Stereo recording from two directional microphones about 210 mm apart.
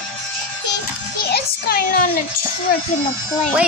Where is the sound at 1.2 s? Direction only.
45° left (ahead or behind).